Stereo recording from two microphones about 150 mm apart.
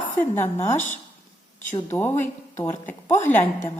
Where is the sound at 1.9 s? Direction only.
15° left (ahead or behind).